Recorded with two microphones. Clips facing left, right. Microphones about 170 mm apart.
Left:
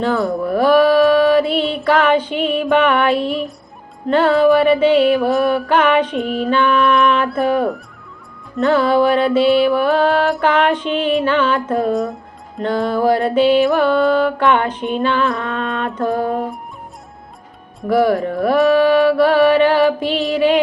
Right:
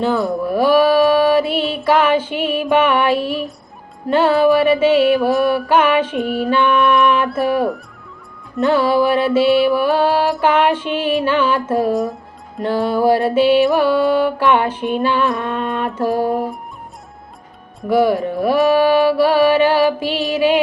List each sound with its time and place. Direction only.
0.0 s music: centre (ahead or behind)
15.3 s music: 20° right (ahead or behind)
15.5 s music: 5° right (ahead or behind)
17.8 s music: centre (ahead or behind)